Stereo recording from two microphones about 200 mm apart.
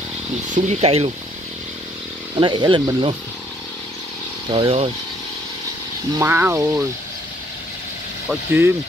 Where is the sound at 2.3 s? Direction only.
25° right (ahead or behind).